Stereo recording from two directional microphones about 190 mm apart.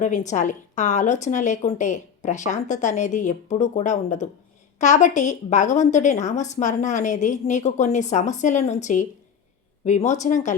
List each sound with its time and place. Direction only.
0.0 s a woman's voice: 40° left (ahead or behind)